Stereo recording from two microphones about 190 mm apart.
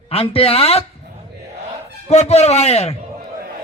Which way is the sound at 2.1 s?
35° left (ahead or behind).